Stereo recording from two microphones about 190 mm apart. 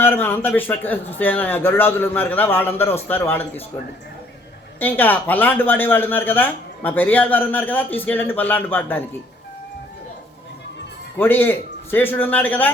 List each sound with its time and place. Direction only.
0.0 s speech: 10° left (ahead or behind)
4.8 s speech: 10° left (ahead or behind)
11.2 s speech: 10° left (ahead or behind)